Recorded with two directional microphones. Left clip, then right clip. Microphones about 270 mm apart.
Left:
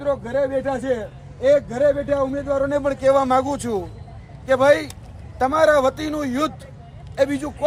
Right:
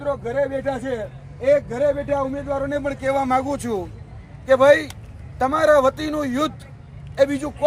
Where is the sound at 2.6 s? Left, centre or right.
Centre.